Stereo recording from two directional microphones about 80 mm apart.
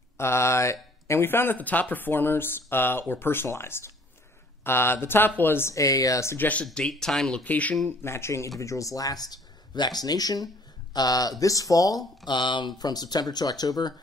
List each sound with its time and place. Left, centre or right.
0.2 s speech: left
5.8 s speech: left
6.3 s speech: left
6.6 s speech: centre
7.4 s speech: centre
8.0 s speech: left
12.3 s speech: left